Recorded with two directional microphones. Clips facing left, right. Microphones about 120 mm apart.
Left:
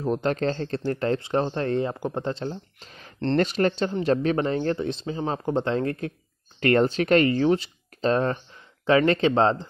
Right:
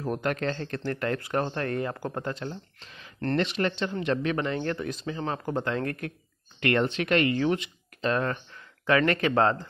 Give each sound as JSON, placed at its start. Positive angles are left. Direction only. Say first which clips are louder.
{"t": 0.0, "sound": "speech", "louder": "left 4 dB", "side_deg": 25}
{"t": 6.6, "sound": "speech", "louder": "left 5 dB", "side_deg": 40}